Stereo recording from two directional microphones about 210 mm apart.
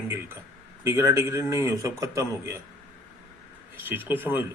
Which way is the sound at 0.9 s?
15° right (ahead or behind).